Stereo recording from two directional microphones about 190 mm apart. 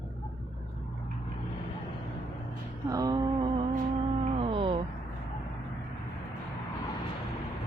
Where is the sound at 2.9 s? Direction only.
20° right (ahead or behind).